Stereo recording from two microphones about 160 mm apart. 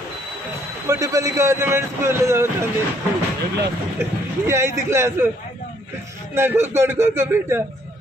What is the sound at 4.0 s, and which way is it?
A man's voice, 15° right (ahead or behind).